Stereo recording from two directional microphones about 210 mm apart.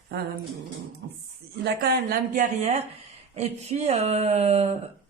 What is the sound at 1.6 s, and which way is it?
Speech, 45° right (ahead or behind).